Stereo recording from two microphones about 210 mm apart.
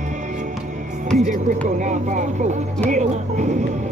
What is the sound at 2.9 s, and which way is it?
Music, 35° right (ahead or behind).